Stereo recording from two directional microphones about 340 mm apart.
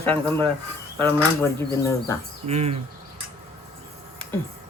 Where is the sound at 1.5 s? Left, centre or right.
Centre.